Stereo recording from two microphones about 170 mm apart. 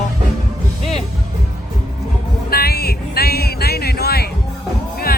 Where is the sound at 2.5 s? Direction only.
65° left (ahead or behind).